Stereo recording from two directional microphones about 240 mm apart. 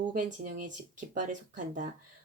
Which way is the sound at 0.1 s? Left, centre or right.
Right.